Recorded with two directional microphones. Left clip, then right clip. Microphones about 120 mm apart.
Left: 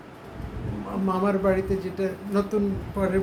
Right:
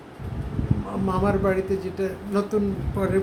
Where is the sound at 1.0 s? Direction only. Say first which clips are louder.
Even; 15° right (ahead or behind).